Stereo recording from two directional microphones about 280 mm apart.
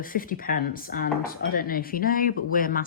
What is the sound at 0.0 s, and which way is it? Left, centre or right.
Speech, left.